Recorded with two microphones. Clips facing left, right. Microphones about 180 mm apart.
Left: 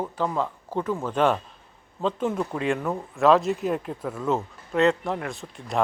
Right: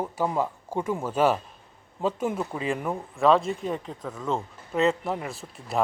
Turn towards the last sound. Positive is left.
turn(degrees=-5)  # may be behind; listen again after turning